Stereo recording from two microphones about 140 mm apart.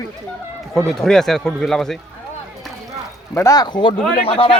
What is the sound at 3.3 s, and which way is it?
A man's voice, 25° left (ahead or behind).